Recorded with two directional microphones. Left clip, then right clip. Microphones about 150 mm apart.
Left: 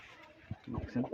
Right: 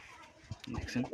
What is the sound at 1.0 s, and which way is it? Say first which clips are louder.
Speech: left 1 dB; 10° right (ahead or behind).